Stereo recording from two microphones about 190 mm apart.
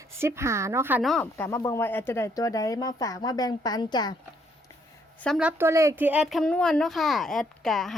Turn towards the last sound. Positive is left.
turn(degrees=0)  # may be behind; listen again after turning